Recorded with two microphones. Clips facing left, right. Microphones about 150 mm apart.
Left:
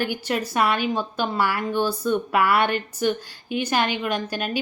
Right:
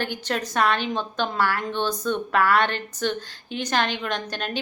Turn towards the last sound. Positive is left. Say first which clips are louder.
# left 3 dB
turn(degrees=10)  # may be behind; listen again after turning